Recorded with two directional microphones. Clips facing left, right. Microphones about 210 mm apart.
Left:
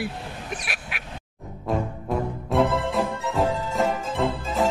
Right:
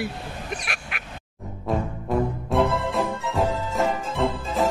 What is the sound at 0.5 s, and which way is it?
Quack, 5° left (ahead or behind).